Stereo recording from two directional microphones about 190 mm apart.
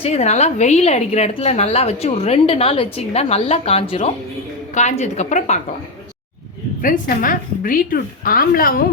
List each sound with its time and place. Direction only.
0.0 s a woman's voice: 35° left (ahead or behind)
6.8 s a woman's voice: 45° left (ahead or behind)